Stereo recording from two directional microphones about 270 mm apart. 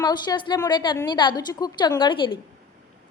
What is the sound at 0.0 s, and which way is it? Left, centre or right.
A woman's voice, centre.